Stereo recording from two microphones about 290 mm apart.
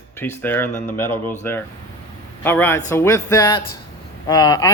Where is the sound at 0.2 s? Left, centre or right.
Centre.